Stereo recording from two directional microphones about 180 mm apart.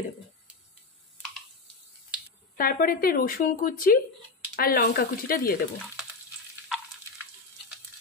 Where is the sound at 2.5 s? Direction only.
55° left (ahead or behind).